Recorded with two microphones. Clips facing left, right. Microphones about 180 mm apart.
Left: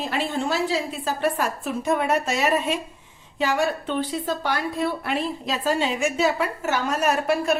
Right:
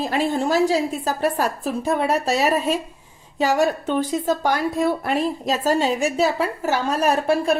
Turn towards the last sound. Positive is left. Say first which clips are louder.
# right 3 dB
turn(degrees=-30)  # may be behind; listen again after turning